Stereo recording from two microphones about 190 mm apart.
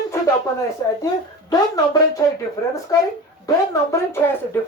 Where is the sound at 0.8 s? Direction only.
20° left (ahead or behind).